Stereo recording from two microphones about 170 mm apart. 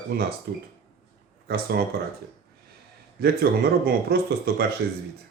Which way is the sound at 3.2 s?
65° right (ahead or behind).